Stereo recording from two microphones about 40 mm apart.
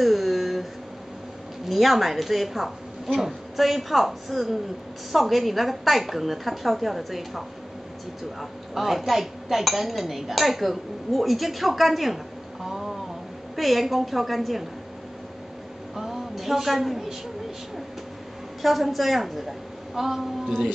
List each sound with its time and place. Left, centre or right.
0.0 s a sound: centre
1.7 s speech: centre
12.6 s a sound: centre
13.6 s speech: centre
16.0 s speech: centre
18.6 s speech: centre